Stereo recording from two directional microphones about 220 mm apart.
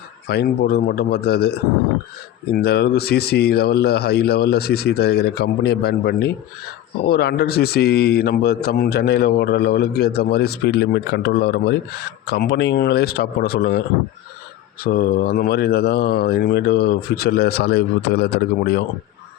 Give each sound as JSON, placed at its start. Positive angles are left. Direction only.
{"t": 0.3, "sound": "speech", "side_deg": 45}
{"t": 14.8, "sound": "speech", "side_deg": 45}